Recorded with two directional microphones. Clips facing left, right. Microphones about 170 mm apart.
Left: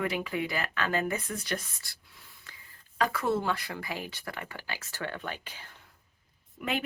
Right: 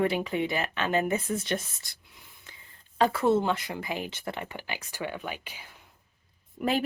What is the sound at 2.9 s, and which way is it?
Speech, 25° right (ahead or behind).